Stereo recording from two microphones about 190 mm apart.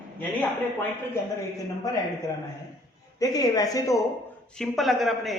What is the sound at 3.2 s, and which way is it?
Speech, 20° left (ahead or behind).